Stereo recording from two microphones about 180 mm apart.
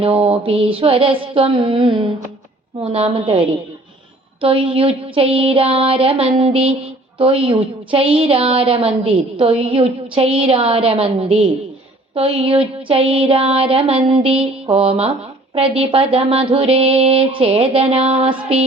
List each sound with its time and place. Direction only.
0.0 s a woman's voice: 30° right (ahead or behind)